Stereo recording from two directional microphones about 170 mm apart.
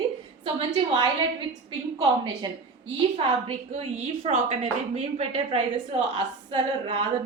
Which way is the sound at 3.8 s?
35° right (ahead or behind).